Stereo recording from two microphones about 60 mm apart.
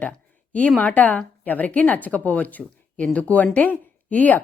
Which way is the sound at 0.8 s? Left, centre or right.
Left.